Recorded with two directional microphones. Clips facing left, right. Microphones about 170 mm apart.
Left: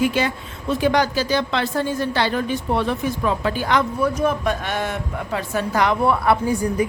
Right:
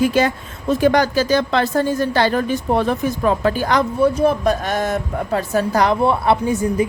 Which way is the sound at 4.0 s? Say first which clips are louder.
Right 5 dB; 30° right (ahead or behind).